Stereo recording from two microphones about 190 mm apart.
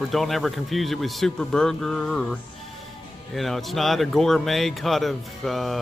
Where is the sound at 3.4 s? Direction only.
Centre (ahead or behind).